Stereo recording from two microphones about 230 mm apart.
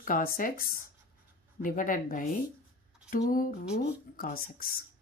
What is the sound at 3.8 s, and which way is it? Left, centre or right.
Speech, left.